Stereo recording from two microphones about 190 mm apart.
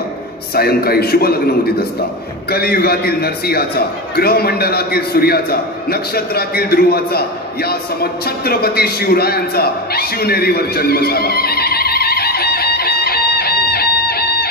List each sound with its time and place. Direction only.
0.6 s a man's voice: 55° left (ahead or behind)
2.5 s a man's voice: 55° left (ahead or behind)